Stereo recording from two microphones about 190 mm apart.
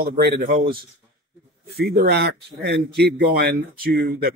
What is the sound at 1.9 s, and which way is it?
Speech, 55° right (ahead or behind).